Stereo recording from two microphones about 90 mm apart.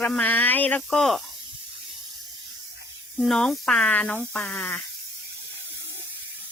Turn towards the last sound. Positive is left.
turn(degrees=20)  # may be behind; listen again after turning